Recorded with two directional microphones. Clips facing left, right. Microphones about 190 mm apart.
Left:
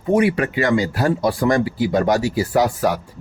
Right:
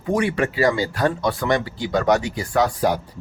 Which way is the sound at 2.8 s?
25° right (ahead or behind).